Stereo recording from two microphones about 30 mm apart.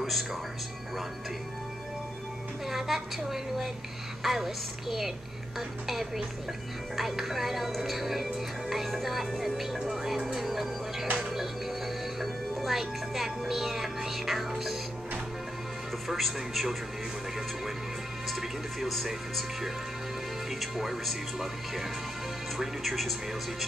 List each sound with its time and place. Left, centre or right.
0.0 s speech: centre
2.7 s a woman's voice: centre
11.1 s music: centre
12.2 s a woman's voice: centre
16.1 s speech: centre
18.4 s speech: centre
20.7 s speech: centre
22.8 s speech: centre